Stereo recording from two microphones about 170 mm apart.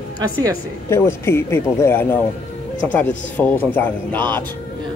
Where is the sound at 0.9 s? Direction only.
15° left (ahead or behind).